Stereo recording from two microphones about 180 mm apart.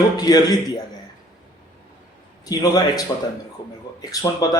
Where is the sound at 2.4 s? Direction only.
20° left (ahead or behind).